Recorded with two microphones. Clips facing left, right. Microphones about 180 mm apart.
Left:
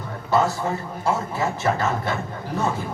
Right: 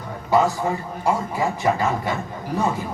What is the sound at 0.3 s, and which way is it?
A woman's voice, 15° right (ahead or behind).